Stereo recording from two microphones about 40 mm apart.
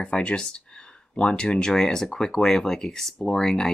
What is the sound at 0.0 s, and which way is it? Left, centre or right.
Speech, left.